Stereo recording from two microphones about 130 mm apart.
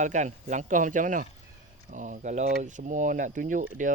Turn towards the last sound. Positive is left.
turn(degrees=-85)